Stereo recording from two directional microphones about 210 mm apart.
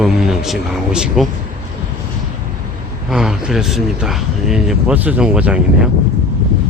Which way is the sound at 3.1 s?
5° right (ahead or behind).